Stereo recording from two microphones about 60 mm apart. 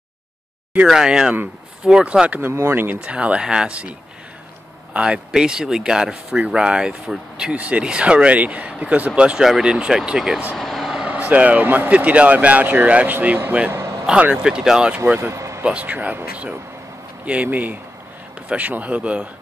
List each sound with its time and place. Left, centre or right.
0.8 s speech: centre
2.7 s speech: right
3.0 s speech: centre
4.9 s speech: centre
7.5 s speech: right; by 10.4 s centre
10.6 s vehicle: centre
11.1 s speech: right
13.7 s a sound: right
14.2 s speech: centre
15.3 s vehicle: right
15.6 s speech: right
17.3 s speech: right